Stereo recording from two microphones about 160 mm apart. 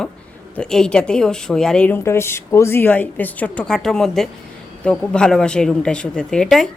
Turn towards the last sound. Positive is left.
turn(degrees=5)  # may be behind; listen again after turning